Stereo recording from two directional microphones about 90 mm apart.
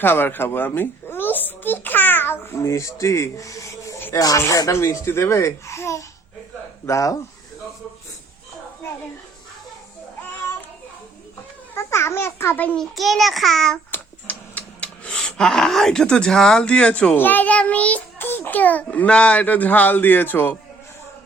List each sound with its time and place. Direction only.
0.0 s a child's voice: 25° left (ahead or behind)
11.7 s babbling: 30° left (ahead or behind)
12.7 s a child's voice: centre (ahead or behind)
13.9 s a sound: 20° left (ahead or behind)
17.2 s a child's voice: 20° left (ahead or behind)